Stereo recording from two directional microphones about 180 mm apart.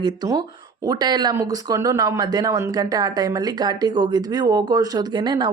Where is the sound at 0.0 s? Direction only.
20° right (ahead or behind).